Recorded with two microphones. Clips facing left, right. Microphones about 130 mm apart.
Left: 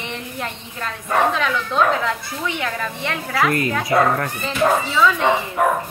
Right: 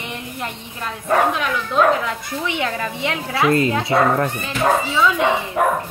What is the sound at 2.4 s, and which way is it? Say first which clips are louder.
Speech: right 1 dB; 20° right (ahead or behind).